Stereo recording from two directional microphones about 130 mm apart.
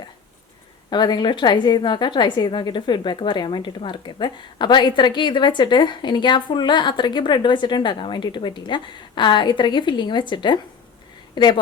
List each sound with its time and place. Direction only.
0.9 s a woman's voice: 35° left (ahead or behind)